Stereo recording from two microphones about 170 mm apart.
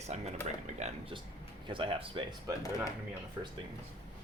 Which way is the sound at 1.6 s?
30° right (ahead or behind).